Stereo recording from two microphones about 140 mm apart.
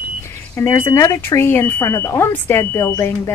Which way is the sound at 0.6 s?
20° left (ahead or behind).